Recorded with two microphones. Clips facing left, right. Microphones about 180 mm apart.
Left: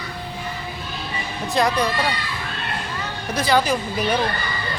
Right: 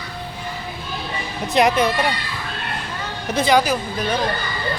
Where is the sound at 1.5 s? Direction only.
20° right (ahead or behind).